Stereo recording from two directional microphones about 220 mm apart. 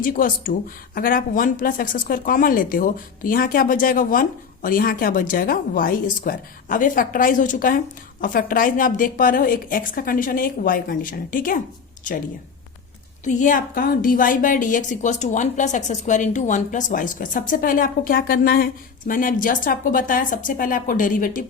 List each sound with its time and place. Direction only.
0.0 s a woman's voice: 40° left (ahead or behind)
13.2 s a woman's voice: 35° left (ahead or behind)